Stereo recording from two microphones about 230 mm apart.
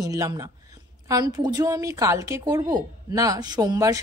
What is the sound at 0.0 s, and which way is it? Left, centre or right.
A woman's voice, centre.